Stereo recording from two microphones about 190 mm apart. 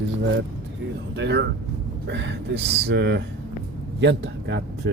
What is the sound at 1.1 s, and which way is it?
Speech, 65° right (ahead or behind).